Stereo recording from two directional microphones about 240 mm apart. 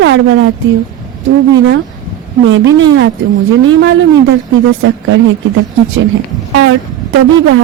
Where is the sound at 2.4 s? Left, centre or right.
Right.